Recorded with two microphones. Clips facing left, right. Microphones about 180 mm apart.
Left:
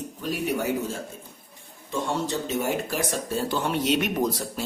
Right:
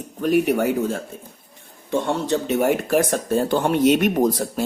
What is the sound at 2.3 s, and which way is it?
Speech, 60° right (ahead or behind).